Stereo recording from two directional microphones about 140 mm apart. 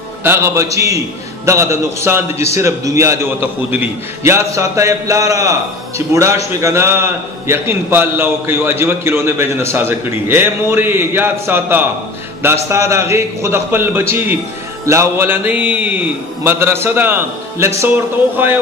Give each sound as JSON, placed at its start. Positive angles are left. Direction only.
{"t": 0.2, "sound": "a man's voice", "side_deg": -20}